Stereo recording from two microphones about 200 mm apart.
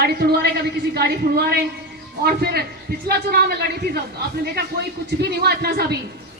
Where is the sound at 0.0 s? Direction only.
50° right (ahead or behind).